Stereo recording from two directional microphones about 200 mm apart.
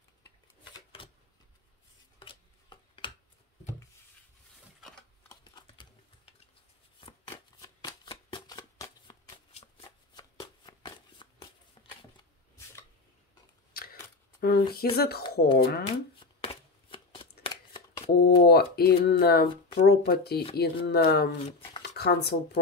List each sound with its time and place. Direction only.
2.1 s chopping: 25° left (ahead or behind)
5.3 s typing: 20° left (ahead or behind)
7.2 s shuffling cards: 15° left (ahead or behind)
8.8 s shuffling cards: 30° left (ahead or behind)
10.1 s shuffling cards: 20° left (ahead or behind)
13.7 s scissors: 50° left (ahead or behind)
14.4 s speech: 50° left (ahead or behind)
16.2 s chopping: 25° left (ahead or behind)
17.4 s a sound: 20° left (ahead or behind)
18.1 s speech: 55° left (ahead or behind)
19.4 s speech: 25° left (ahead or behind)
19.9 s speech: 50° left (ahead or behind)